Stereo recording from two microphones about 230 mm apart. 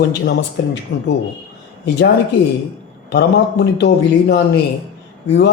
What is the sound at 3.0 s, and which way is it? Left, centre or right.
A man's voice, left.